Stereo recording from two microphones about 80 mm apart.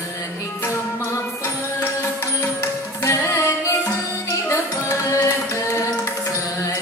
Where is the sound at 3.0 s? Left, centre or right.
Left.